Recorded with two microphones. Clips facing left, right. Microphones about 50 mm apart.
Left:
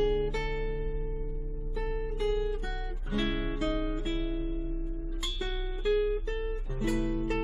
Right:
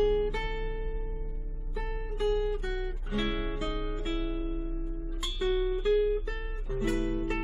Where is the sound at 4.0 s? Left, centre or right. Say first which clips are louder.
Even; centre.